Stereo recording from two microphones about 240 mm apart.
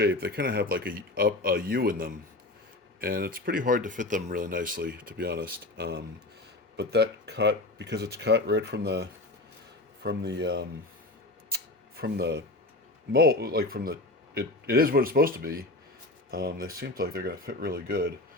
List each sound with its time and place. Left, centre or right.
0.0 s speech: right
11.5 s a sound: right
13.1 s speech: right